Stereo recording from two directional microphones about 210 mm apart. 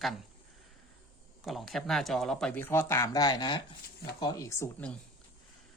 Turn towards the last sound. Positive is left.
turn(degrees=10)  # may be behind; listen again after turning